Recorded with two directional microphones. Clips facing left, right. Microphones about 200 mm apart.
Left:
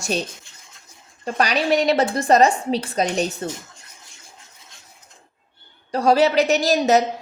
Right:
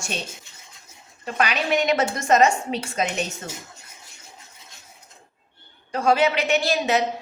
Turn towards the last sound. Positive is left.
turn(degrees=40)  # may be behind; listen again after turning